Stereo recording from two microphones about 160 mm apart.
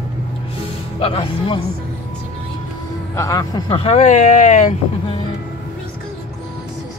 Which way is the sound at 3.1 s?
20° left (ahead or behind).